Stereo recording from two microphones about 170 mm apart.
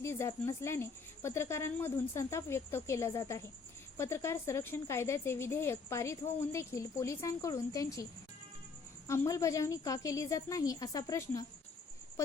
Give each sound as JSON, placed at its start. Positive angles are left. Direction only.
{"t": 0.0, "sound": "speech", "side_deg": 15}
{"t": 9.0, "sound": "a woman's voice", "side_deg": 15}